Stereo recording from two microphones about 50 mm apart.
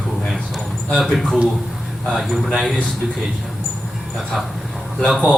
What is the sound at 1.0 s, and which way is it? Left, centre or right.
Speech, centre.